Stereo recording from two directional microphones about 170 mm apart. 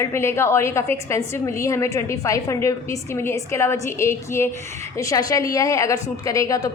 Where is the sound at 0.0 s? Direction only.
15° left (ahead or behind).